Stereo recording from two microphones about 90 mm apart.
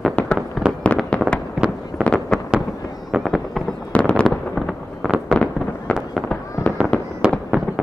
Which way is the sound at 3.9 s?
10° left (ahead or behind).